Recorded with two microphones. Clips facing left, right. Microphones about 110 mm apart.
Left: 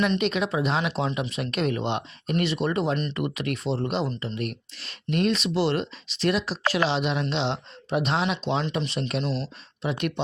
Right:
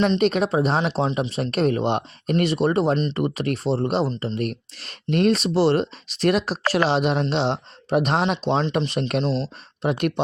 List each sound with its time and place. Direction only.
0.2 s speech: 40° right (ahead or behind)
2.9 s speech: 25° right (ahead or behind)
3.2 s speech: 40° right (ahead or behind)
4.4 s speech: 45° right (ahead or behind)
8.9 s speech: 50° right (ahead or behind)
9.2 s speech: 35° right (ahead or behind)
9.8 s speech: 50° right (ahead or behind)